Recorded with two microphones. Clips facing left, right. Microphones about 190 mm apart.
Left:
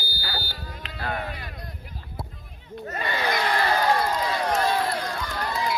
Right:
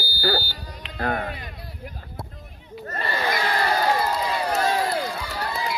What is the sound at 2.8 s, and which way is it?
Speech, 10° left (ahead or behind).